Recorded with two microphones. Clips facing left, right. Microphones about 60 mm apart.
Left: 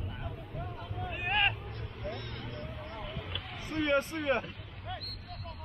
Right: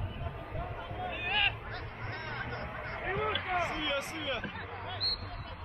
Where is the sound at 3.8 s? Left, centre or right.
Left.